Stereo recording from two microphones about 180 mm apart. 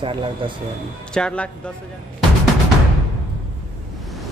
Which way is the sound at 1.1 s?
5° left (ahead or behind).